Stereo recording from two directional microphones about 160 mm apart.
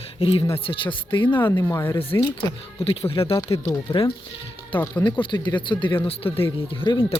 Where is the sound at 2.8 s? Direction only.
35° left (ahead or behind).